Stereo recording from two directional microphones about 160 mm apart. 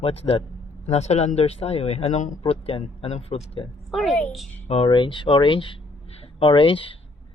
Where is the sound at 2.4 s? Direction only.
35° left (ahead or behind).